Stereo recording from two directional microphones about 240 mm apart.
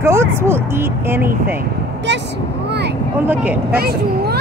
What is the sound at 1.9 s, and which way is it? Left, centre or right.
Vehicle, right.